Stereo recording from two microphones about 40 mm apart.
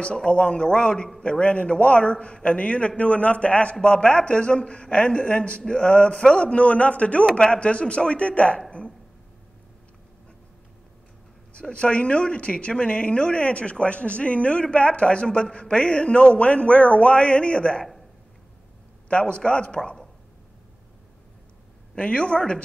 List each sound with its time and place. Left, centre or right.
0.0 s speech: left
11.7 s speech: left
19.0 s speech: left
21.9 s speech: left